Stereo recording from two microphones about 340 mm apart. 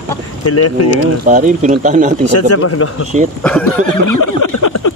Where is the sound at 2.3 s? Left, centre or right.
Left.